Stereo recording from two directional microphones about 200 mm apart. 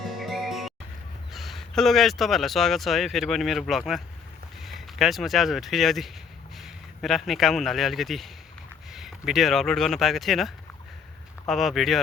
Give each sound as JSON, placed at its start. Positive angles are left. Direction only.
{"t": 0.0, "sound": "music", "side_deg": 0}
{"t": 1.3, "sound": "speech", "side_deg": 0}